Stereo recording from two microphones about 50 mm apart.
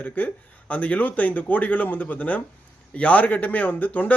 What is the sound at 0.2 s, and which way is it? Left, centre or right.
A man's voice, left.